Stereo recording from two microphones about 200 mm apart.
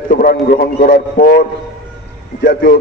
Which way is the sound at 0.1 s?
45° left (ahead or behind).